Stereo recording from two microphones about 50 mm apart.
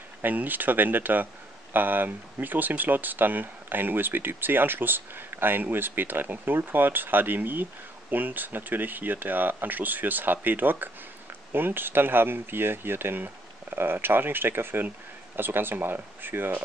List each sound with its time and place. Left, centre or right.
0.2 s speech: right